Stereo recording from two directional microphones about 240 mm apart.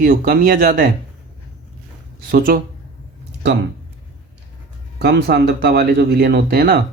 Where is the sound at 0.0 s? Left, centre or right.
Right.